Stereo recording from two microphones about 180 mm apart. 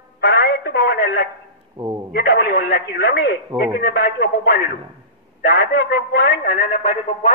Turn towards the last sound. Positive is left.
turn(degrees=35)  # may be behind; listen again after turning